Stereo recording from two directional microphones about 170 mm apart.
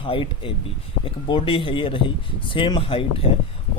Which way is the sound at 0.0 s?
30° left (ahead or behind).